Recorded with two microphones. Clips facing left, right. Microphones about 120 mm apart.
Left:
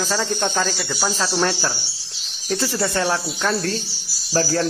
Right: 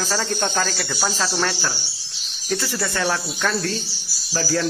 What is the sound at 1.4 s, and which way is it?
Speech, 25° left (ahead or behind).